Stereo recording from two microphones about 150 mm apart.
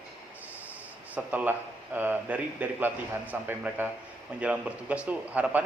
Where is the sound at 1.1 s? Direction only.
10° right (ahead or behind).